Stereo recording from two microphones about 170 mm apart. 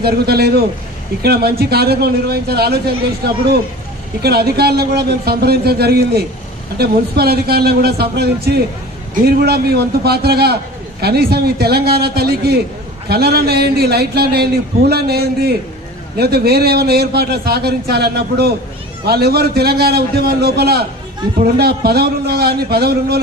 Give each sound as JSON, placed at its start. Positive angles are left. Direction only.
{"t": 0.0, "sound": "a man's voice", "side_deg": -70}
{"t": 4.2, "sound": "a man's voice", "side_deg": -65}